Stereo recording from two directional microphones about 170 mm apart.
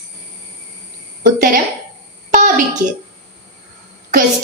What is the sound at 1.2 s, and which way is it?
Speech, 50° right (ahead or behind).